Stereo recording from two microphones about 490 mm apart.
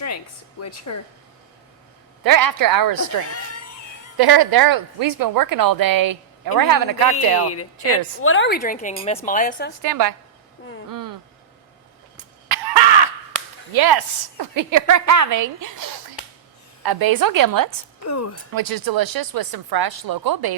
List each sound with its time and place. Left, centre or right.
0.6 s a woman's voice: left
2.2 s a woman's voice: right
3.2 s speech: left
4.2 s a woman's voice: right
7.4 s a woman's voice: left
9.8 s a woman's voice: right
10.8 s a sound: right
13.7 s a woman's voice: right
18.0 s a woman's voice: left
18.5 s a woman's voice: right